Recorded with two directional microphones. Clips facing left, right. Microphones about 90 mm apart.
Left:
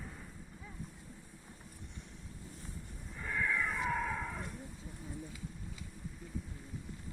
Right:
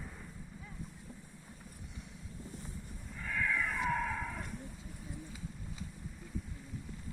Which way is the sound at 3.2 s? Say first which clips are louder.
Even; 15° left (ahead or behind).